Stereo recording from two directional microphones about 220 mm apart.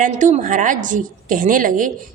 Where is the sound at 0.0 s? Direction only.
35° right (ahead or behind).